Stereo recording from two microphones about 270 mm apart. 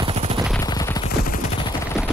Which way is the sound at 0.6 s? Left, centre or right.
Centre.